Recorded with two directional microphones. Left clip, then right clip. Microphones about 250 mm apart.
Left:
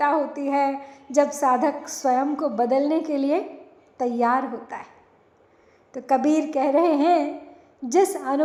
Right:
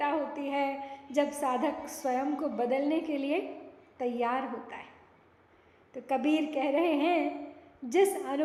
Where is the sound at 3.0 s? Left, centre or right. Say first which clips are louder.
Left 8 dB; centre.